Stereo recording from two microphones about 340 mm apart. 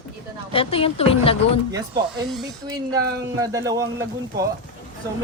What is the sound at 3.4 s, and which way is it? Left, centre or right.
Speech, centre.